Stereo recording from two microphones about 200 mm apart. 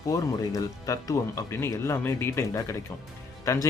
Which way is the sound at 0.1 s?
15° left (ahead or behind).